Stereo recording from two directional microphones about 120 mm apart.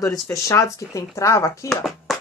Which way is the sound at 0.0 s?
30° left (ahead or behind).